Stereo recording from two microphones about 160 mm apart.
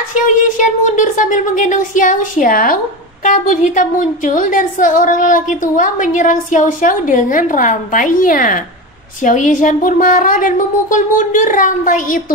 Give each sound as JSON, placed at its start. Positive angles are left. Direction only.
{"t": 0.6, "sound": "a woman's voice", "side_deg": 50}